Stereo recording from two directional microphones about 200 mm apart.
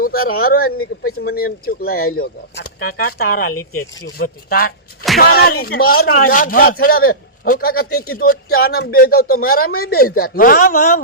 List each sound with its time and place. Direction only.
0.3 s speech: 50° left (ahead or behind)